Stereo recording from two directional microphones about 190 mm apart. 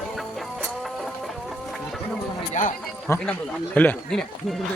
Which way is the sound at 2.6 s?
40° left (ahead or behind).